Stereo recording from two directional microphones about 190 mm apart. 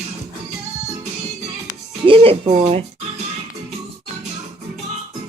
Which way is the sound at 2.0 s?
30° right (ahead or behind).